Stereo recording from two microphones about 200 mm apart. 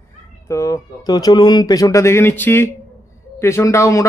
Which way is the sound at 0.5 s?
15° left (ahead or behind).